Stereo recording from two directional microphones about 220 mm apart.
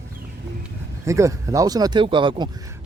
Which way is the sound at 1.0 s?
15° right (ahead or behind).